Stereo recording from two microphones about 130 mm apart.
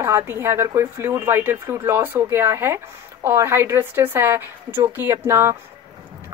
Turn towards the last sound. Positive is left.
turn(degrees=-20)  # may be behind; listen again after turning